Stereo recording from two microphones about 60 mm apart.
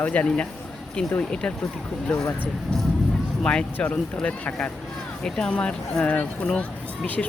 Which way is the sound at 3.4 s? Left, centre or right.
Centre.